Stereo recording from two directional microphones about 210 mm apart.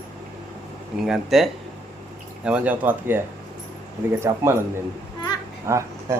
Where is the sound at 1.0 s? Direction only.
Centre (ahead or behind).